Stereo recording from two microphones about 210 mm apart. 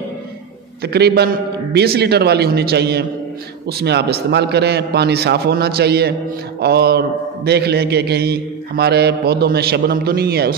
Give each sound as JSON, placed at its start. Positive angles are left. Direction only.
{"t": 0.8, "sound": "a man's voice", "side_deg": -50}